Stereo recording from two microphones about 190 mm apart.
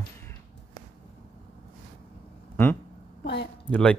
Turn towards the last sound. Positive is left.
turn(degrees=10)  # may be behind; listen again after turning